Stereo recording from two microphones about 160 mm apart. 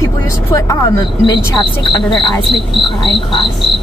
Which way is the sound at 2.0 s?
Centre (ahead or behind).